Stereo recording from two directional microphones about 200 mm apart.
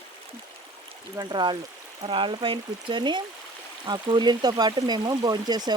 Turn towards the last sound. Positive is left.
turn(degrees=-20)  # may be behind; listen again after turning